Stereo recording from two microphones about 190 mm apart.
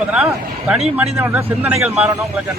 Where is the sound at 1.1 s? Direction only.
15° right (ahead or behind).